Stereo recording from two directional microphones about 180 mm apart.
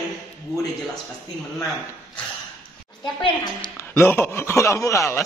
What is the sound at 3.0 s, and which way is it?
Speech, 25° left (ahead or behind).